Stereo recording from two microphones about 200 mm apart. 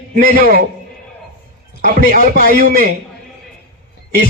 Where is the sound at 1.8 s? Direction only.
45° right (ahead or behind).